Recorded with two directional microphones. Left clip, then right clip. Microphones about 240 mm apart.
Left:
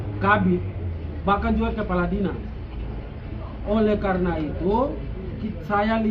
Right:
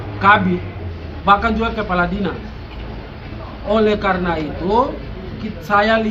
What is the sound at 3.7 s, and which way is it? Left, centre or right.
Speech, right.